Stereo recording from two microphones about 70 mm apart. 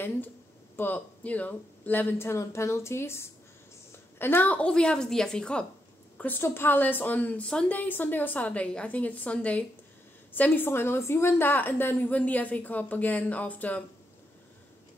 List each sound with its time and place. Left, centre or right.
0.7 s a woman's voice: left
6.1 s a sound: left
6.4 s a woman's voice: left